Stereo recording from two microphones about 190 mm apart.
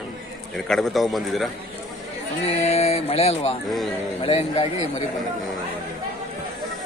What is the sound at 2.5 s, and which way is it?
Music, 35° left (ahead or behind).